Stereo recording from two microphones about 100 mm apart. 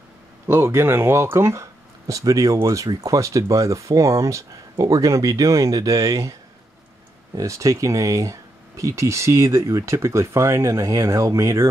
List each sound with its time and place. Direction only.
0.5 s speech: 25° right (ahead or behind)
7.3 s speech: 30° right (ahead or behind)